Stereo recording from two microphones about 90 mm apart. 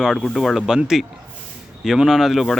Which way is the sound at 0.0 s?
Centre (ahead or behind).